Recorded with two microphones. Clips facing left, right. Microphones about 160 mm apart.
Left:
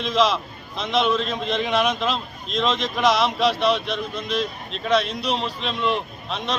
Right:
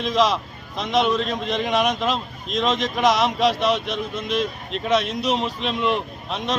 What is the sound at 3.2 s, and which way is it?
Speech, 45° right (ahead or behind).